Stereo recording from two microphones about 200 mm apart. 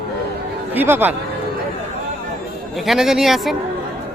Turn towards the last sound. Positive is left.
turn(degrees=0)  # may be behind; listen again after turning